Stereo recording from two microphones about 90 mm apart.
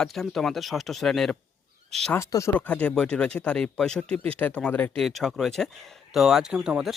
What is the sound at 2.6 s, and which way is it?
Speech, 15° left (ahead or behind).